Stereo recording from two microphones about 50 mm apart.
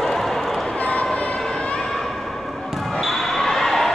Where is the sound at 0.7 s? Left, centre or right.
Left.